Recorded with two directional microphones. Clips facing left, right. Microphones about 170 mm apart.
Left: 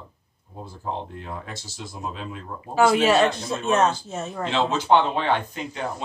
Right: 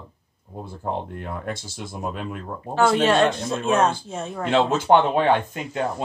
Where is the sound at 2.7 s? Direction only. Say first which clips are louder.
Even; 5° left (ahead or behind).